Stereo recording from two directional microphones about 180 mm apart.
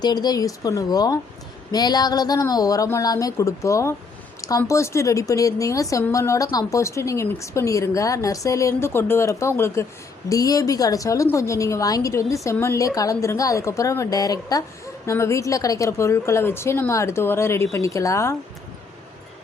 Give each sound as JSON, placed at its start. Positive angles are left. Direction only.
{"t": 0.0, "sound": "a woman's voice", "side_deg": 20}